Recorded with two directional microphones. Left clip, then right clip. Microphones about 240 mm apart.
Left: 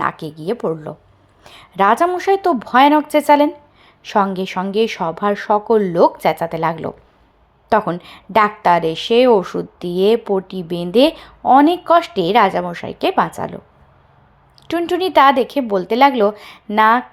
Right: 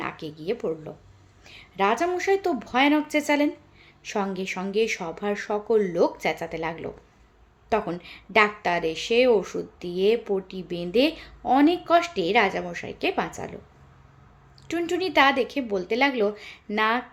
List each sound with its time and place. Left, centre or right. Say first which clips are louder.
0.0 s a woman's voice: left 11 dB; left
14.7 s a woman's voice: left 9 dB; centre